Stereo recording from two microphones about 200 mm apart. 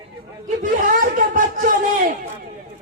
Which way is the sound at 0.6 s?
40° right (ahead or behind).